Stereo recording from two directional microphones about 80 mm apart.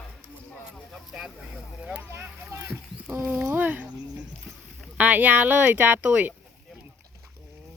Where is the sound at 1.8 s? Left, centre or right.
Centre.